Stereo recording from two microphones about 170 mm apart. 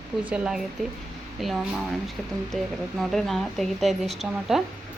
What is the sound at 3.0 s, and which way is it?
A woman's voice, centre (ahead or behind).